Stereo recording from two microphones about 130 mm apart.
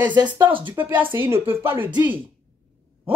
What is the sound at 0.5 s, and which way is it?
Speech, 40° right (ahead or behind).